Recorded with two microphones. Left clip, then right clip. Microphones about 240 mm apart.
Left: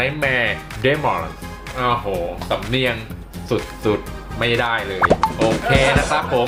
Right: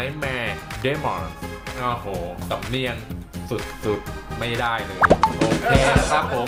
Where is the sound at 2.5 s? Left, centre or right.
Centre.